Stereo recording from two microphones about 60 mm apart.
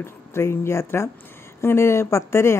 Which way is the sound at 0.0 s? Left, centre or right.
Left.